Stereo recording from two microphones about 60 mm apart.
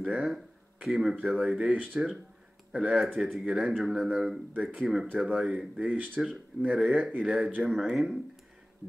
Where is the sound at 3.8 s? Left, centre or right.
Centre.